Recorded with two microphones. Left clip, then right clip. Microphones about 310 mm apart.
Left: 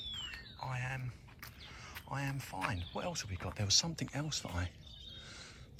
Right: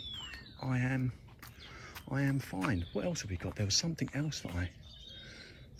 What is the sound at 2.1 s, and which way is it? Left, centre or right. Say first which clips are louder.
Speech: right 5 dB; centre.